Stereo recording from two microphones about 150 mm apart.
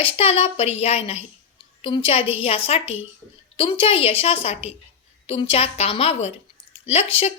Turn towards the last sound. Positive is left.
turn(degrees=40)  # may be behind; listen again after turning